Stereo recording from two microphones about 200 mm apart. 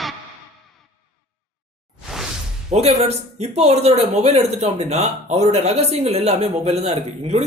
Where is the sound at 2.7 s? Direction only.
35° right (ahead or behind).